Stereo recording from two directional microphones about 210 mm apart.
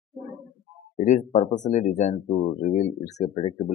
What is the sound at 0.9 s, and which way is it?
Speech, 35° left (ahead or behind).